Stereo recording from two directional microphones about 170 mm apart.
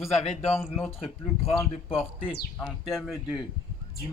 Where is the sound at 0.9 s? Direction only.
35° left (ahead or behind).